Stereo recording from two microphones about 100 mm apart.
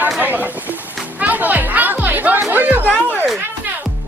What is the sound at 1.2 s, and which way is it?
Music, 15° right (ahead or behind).